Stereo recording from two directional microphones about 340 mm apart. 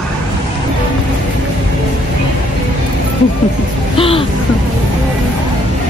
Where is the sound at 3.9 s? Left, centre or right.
Centre.